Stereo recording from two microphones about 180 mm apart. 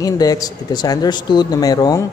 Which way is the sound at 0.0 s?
20° left (ahead or behind).